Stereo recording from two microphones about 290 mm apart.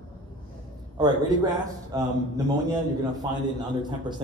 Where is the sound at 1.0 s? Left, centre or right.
Centre.